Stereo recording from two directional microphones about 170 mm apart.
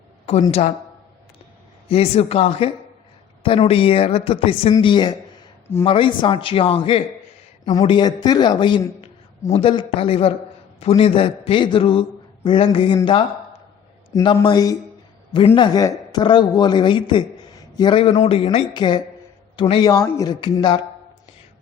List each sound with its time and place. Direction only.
1.9 s a man's voice: 35° left (ahead or behind)
14.1 s speech: 20° left (ahead or behind)